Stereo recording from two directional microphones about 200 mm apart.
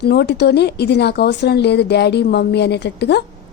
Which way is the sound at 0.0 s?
55° left (ahead or behind).